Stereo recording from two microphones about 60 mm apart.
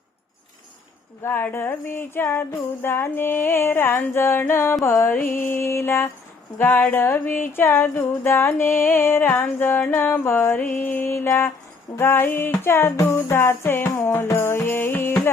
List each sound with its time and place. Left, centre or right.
1.3 s music: left
4.9 s mantra: left
5.1 s music: left
6.6 s music: left
11.3 s mantra: left
11.9 s music: left